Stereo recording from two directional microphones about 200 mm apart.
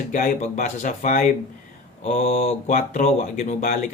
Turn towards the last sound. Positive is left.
turn(degrees=40)  # may be behind; listen again after turning